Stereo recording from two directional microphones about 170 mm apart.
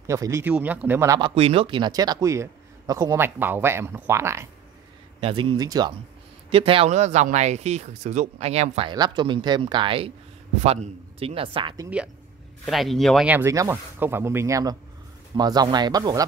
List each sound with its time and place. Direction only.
0.0 s speech: 15° right (ahead or behind)
1.3 s speech: 35° right (ahead or behind); by 4.5 s 15° right (ahead or behind)
5.2 s speech: 30° right (ahead or behind)
6.5 s speech: 35° right (ahead or behind)
8.9 s speech: 25° right (ahead or behind)
12.6 s speech: centre (ahead or behind)
13.3 s speech: 15° right (ahead or behind)